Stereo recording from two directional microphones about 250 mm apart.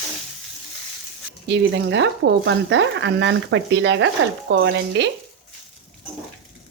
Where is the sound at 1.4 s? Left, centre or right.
Right.